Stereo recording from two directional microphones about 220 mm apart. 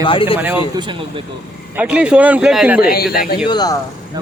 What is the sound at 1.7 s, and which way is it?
Speech, 5° right (ahead or behind).